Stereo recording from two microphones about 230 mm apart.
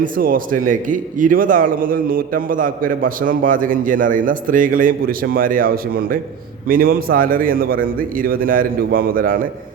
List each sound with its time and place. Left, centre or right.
0.0 s a man's voice: right